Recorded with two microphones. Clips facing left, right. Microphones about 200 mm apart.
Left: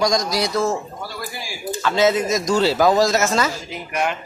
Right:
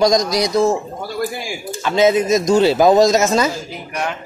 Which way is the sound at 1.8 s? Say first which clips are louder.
Right 3 dB; 15° right (ahead or behind).